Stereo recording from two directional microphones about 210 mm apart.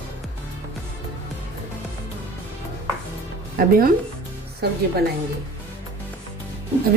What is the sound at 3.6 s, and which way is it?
A woman's voice, 45° right (ahead or behind).